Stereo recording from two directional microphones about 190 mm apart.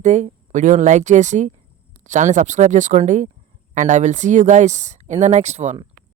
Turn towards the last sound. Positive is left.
turn(degrees=-35)  # may be behind; listen again after turning